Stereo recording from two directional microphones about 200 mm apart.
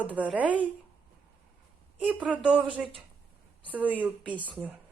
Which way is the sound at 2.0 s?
5° right (ahead or behind).